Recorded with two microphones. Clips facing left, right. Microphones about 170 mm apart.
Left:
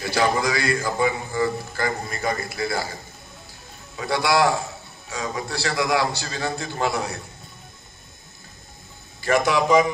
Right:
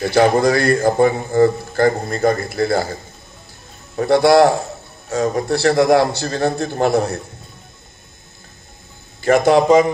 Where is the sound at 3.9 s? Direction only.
55° right (ahead or behind).